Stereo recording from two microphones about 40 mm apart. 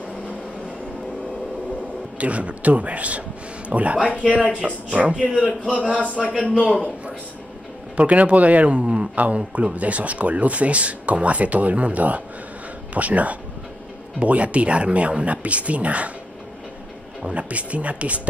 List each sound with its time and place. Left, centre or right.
2.1 s speech: right
4.0 s speech: left
4.6 s speech: right
5.8 s speech: left
7.9 s speech: right
9.1 s speech: right
17.3 s speech: right